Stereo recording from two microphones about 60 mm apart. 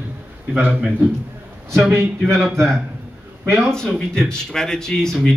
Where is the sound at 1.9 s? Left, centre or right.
Right.